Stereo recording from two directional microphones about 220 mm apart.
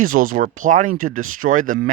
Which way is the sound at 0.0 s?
40° right (ahead or behind).